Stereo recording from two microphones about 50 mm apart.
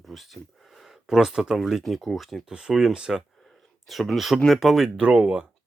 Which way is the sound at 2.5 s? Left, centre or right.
Centre.